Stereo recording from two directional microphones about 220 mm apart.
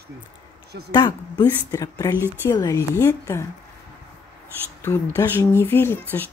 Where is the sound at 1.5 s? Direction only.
15° left (ahead or behind).